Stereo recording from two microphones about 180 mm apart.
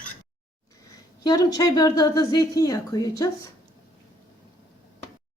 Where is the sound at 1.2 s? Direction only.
20° left (ahead or behind).